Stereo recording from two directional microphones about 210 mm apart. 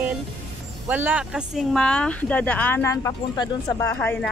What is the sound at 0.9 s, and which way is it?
Speech, 10° right (ahead or behind).